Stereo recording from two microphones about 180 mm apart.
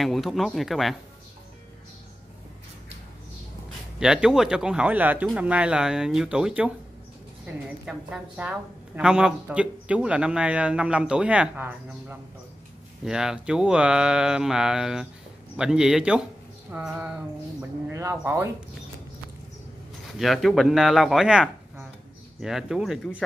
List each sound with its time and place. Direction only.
0.0 s speech: centre (ahead or behind)
4.0 s a woman's voice: 5° right (ahead or behind)
20.2 s speech: centre (ahead or behind)